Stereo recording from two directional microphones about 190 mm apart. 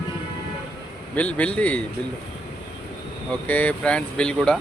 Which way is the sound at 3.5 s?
5° left (ahead or behind).